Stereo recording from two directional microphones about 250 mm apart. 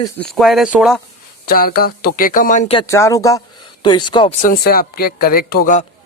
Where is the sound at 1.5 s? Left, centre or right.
Left.